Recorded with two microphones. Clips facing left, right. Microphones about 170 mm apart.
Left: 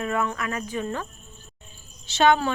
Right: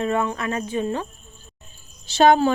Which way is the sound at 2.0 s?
40° right (ahead or behind).